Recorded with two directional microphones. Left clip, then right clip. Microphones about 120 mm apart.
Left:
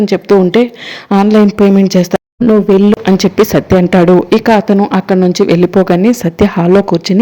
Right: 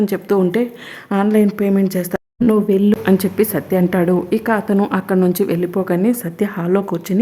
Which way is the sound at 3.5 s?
45° left (ahead or behind).